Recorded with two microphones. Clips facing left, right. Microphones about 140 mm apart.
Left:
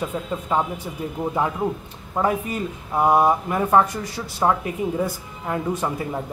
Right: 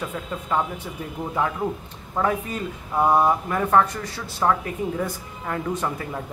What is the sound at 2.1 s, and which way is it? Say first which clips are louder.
Speech: left 2 dB; 15° left (ahead or behind).